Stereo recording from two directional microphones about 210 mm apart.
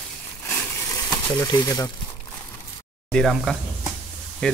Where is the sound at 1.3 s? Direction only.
20° left (ahead or behind).